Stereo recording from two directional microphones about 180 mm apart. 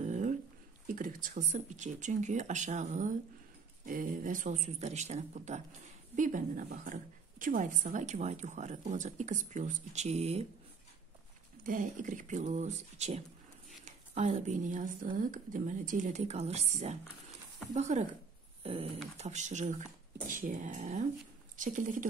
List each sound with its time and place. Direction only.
0.0 s a sound: 40° right (ahead or behind)
0.8 s a woman's voice: 50° right (ahead or behind)
11.6 s a woman's voice: 45° right (ahead or behind)
18.6 s dog: 30° right (ahead or behind)
19.1 s a woman's voice: 40° right (ahead or behind)